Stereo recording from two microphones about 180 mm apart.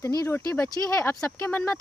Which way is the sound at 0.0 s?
20° left (ahead or behind).